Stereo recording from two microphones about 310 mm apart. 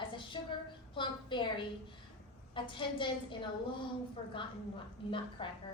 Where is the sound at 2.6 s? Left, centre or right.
Centre.